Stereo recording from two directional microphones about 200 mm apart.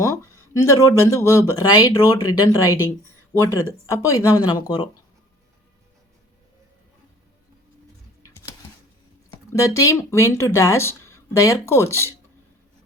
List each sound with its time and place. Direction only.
0.0 s speech: 15° left (ahead or behind)
9.3 s speech: 15° left (ahead or behind)